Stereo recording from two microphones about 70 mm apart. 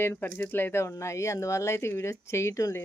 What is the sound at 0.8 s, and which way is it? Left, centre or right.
A woman's voice, left.